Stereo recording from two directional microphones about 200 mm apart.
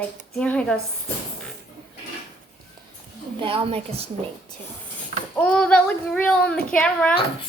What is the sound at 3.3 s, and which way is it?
Speech, 25° right (ahead or behind).